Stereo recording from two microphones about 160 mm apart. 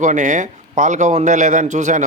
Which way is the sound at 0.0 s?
50° right (ahead or behind).